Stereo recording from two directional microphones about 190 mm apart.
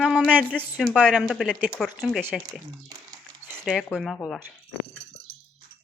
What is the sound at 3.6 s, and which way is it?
Speech, centre (ahead or behind).